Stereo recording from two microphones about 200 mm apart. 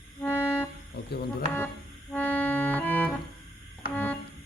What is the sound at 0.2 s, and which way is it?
Music, 10° left (ahead or behind).